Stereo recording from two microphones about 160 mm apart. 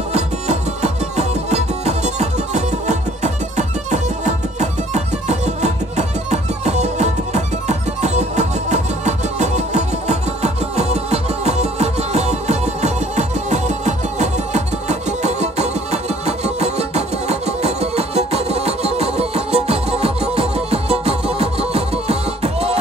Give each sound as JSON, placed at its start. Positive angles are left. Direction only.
{"t": 0.1, "sound": "music", "side_deg": -45}